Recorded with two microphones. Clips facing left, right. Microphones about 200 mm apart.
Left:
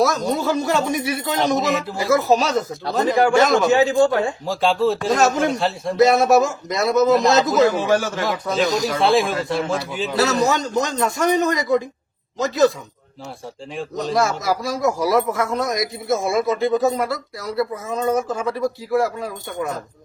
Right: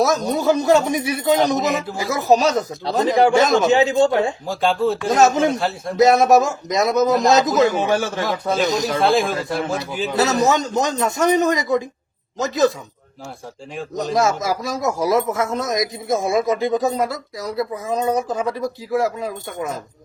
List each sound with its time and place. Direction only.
0.3 s speech: 20° right (ahead or behind)
1.4 s speech: centre (ahead or behind)
2.0 s speech: 15° right (ahead or behind)
4.4 s speech: centre (ahead or behind)
5.1 s speech: 20° right (ahead or behind)
5.5 s speech: centre (ahead or behind)
6.0 s speech: 20° right (ahead or behind)
9.0 s speech: centre (ahead or behind)
10.2 s speech: 20° right (ahead or behind)
14.2 s speech: 20° right (ahead or behind)